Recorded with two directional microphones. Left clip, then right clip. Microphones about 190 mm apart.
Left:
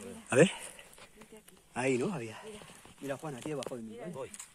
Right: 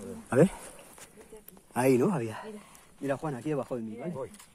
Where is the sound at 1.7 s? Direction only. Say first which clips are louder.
Right 7 dB; 30° right (ahead or behind).